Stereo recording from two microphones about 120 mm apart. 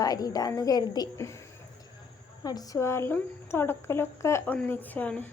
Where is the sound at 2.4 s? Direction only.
30° left (ahead or behind); by 5.3 s 15° left (ahead or behind).